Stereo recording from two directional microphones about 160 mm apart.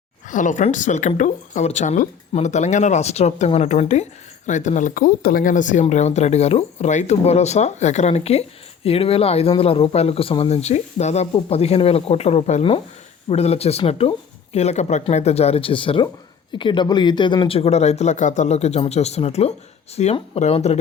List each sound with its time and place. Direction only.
0.3 s speech: 55° left (ahead or behind)